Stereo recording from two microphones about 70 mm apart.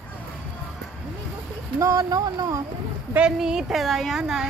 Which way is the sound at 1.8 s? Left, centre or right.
Right.